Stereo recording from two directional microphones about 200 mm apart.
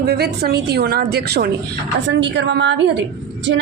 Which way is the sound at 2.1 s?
65° right (ahead or behind).